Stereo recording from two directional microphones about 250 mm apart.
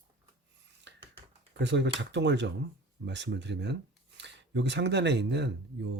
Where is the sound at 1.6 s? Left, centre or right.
Right.